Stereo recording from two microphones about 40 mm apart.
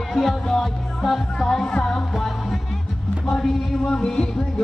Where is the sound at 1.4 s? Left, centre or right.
Centre.